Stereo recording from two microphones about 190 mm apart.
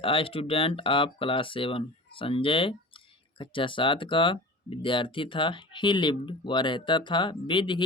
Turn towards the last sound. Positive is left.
turn(degrees=25)  # may be behind; listen again after turning